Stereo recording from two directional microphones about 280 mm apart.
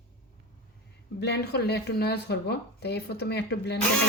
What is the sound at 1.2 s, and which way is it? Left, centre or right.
Speech, left.